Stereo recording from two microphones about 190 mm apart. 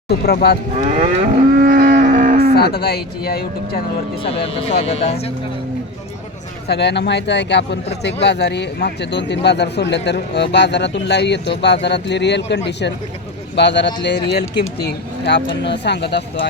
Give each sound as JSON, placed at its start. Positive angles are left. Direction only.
{"t": 0.1, "sound": "speech", "side_deg": 55}
{"t": 0.9, "sound": "livestock", "side_deg": -40}
{"t": 2.0, "sound": "cattle", "side_deg": -45}
{"t": 2.6, "sound": "speech", "side_deg": 55}
{"t": 4.2, "sound": "speech", "side_deg": 30}
{"t": 6.7, "sound": "speech", "side_deg": 65}